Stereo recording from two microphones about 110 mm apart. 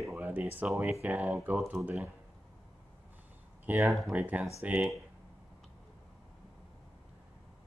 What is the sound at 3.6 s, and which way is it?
Speech, 15° right (ahead or behind).